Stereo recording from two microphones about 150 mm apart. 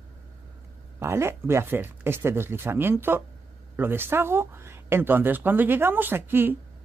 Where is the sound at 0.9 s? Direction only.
20° right (ahead or behind).